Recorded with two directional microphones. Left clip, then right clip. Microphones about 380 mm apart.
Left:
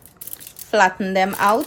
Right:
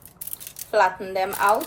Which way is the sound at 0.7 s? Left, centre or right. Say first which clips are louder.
Left 4 dB; left.